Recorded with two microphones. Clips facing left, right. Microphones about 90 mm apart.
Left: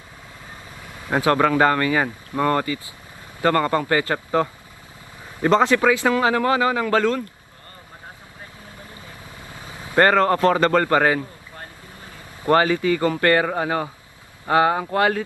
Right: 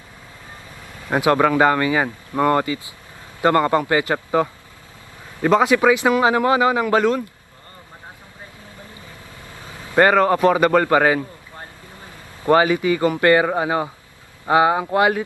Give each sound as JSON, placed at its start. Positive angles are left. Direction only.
{"t": 1.1, "sound": "a man's voice", "side_deg": -15}
{"t": 10.0, "sound": "a man's voice", "side_deg": -10}
{"t": 12.5, "sound": "a man's voice", "side_deg": -15}